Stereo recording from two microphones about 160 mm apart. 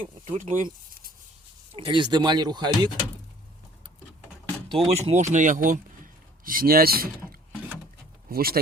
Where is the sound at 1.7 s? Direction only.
35° right (ahead or behind).